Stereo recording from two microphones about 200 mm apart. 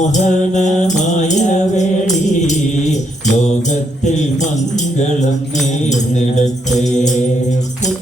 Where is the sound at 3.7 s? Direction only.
35° left (ahead or behind).